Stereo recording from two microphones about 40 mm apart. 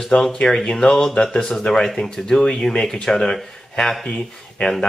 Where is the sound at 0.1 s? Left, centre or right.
Centre.